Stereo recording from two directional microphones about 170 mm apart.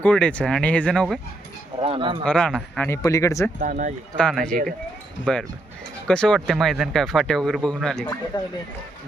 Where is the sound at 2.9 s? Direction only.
20° left (ahead or behind).